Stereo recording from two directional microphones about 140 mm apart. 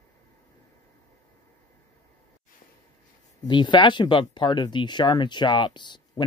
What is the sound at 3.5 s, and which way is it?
Speech, 35° left (ahead or behind).